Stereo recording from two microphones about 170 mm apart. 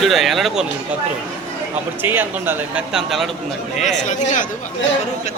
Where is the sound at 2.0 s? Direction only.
10° right (ahead or behind).